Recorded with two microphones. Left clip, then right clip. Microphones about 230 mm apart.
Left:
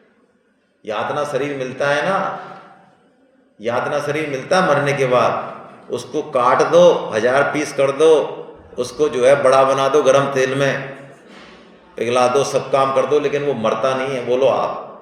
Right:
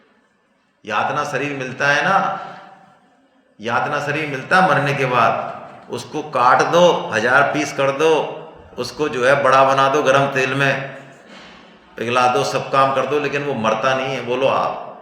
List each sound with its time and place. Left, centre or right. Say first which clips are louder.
0.9 s a man's voice: right 1 dB; right
3.6 s a man's voice: even; right
11.9 s a man's voice: left 1 dB; right